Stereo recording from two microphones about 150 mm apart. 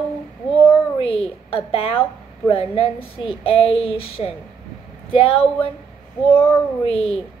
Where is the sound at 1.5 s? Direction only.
40° left (ahead or behind).